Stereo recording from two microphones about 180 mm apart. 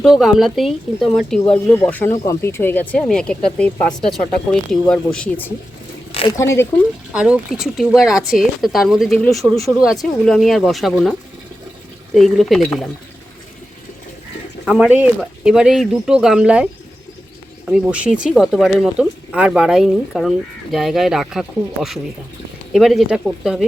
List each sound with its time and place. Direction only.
0.0 s speech: centre (ahead or behind)
6.1 s zipper: 30° left (ahead or behind)
6.3 s speech: 15° left (ahead or behind)
7.1 s speech: 5° right (ahead or behind)
14.6 s speech: 5° right (ahead or behind)
17.7 s speech: 5° right (ahead or behind)